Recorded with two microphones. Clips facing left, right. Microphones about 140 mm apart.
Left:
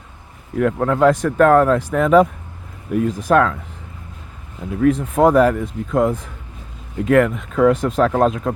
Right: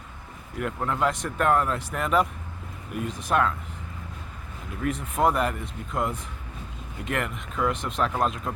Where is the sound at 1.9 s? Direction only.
90° left.